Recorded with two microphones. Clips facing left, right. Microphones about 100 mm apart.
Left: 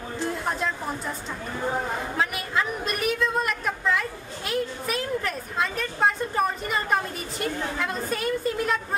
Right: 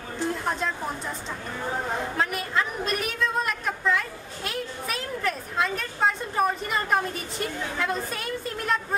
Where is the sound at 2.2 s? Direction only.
Centre (ahead or behind).